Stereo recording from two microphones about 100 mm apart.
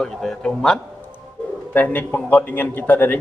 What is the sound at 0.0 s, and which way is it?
Speech, 5° left (ahead or behind).